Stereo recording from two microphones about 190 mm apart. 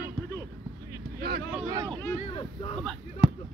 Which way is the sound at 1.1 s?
55° right (ahead or behind).